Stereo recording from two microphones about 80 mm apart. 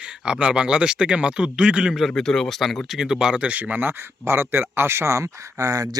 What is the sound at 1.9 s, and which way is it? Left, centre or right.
Speech, centre.